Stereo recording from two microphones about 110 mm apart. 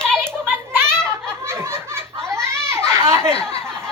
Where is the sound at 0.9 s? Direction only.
5° left (ahead or behind).